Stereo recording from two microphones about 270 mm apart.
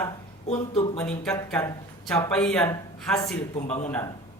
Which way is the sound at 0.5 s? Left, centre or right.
Centre.